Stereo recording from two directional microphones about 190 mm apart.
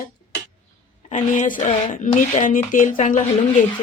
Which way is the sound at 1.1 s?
40° left (ahead or behind).